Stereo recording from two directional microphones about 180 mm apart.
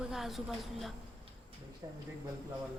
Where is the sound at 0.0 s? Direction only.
Centre (ahead or behind).